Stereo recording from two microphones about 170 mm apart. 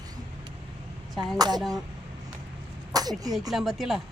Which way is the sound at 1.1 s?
Centre (ahead or behind).